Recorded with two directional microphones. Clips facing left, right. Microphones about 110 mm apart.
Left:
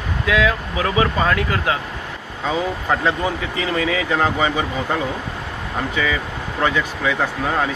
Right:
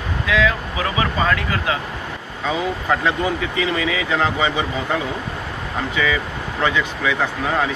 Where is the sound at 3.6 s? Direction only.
40° left (ahead or behind).